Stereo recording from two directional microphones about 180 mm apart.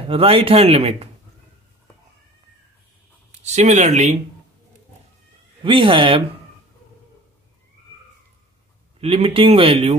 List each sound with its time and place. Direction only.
0.1 s speech: 30° right (ahead or behind)
3.3 s speech: 40° right (ahead or behind)
5.6 s speech: 30° right (ahead or behind)
9.0 s speech: 30° right (ahead or behind)